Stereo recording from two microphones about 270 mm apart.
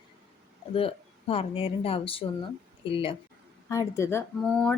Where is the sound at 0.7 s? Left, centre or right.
Centre.